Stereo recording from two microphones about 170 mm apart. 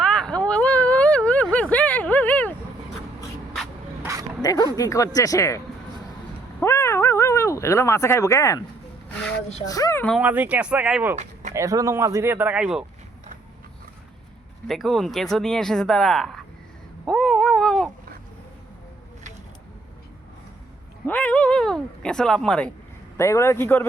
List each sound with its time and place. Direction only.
0.0 s a sound: 5° left (ahead or behind)
4.0 s dog: 20° right (ahead or behind)
4.4 s speech: 20° left (ahead or behind)
6.6 s a sound: 15° left (ahead or behind)
9.6 s speech: 20° left (ahead or behind)
10.2 s speech: 10° right (ahead or behind)
14.7 s speech: centre (ahead or behind)
17.1 s cat: centre (ahead or behind)
21.1 s speech: 10° left (ahead or behind)
23.1 s a man's voice: 15° left (ahead or behind)